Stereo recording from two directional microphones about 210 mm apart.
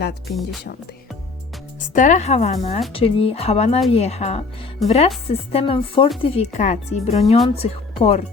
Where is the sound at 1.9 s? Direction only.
35° left (ahead or behind).